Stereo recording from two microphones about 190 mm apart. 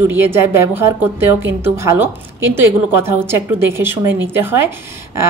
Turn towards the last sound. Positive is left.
turn(degrees=-10)  # may be behind; listen again after turning